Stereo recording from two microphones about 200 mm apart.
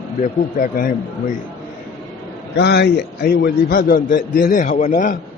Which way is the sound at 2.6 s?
55° left (ahead or behind).